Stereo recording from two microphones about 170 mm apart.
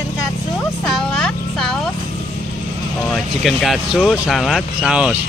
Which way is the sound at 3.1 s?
Centre (ahead or behind).